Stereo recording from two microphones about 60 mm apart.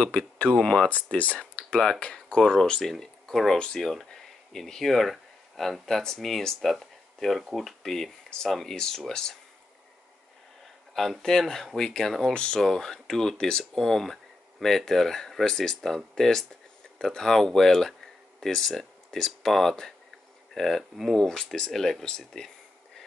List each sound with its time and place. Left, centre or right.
0.6 s speech: centre
1.1 s speech: left; by 3.5 s centre
3.5 s speech: centre
11.0 s speech: centre